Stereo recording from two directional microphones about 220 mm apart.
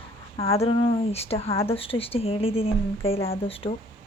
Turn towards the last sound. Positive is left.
turn(degrees=25)  # may be behind; listen again after turning